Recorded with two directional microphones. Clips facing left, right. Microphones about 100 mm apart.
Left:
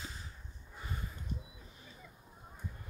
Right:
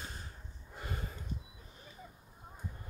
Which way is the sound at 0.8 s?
65° right (ahead or behind).